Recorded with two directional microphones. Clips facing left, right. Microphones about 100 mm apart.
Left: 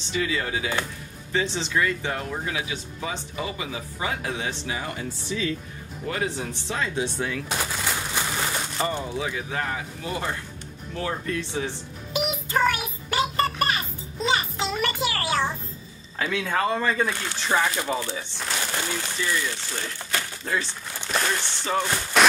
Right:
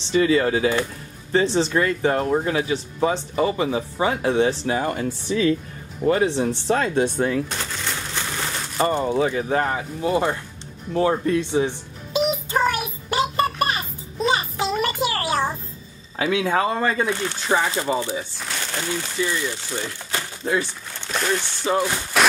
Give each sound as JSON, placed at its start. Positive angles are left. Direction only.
{"t": 0.1, "sound": "speech", "side_deg": -40}
{"t": 4.6, "sound": "speech", "side_deg": -50}
{"t": 6.0, "sound": "speech", "side_deg": -30}
{"t": 6.4, "sound": "speech", "side_deg": -50}
{"t": 7.4, "sound": "crumpling", "side_deg": 5}
{"t": 8.7, "sound": "speech", "side_deg": -50}
{"t": 9.3, "sound": "speech", "side_deg": -40}
{"t": 11.0, "sound": "music", "side_deg": -25}
{"t": 15.1, "sound": "a sound", "side_deg": -15}
{"t": 16.2, "sound": "speech", "side_deg": -15}
{"t": 18.6, "sound": "a sound", "side_deg": 5}
{"t": 19.2, "sound": "speech", "side_deg": -15}
{"t": 20.1, "sound": "crumpling", "side_deg": -20}
{"t": 21.1, "sound": "speech", "side_deg": 0}